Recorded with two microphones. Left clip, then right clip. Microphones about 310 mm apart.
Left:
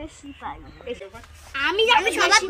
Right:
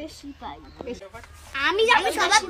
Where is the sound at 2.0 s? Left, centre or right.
Centre.